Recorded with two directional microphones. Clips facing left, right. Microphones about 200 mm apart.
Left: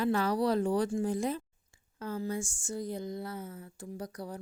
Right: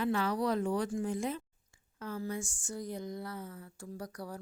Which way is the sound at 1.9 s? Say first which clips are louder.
Left 3 dB; 30° left (ahead or behind).